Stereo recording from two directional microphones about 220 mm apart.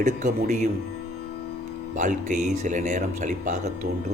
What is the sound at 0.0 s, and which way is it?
Speech, 35° right (ahead or behind).